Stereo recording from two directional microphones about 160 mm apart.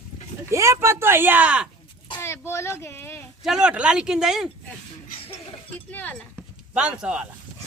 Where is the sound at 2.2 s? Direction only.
15° left (ahead or behind).